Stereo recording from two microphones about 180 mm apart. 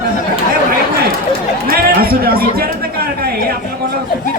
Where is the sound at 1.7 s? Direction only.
55° right (ahead or behind).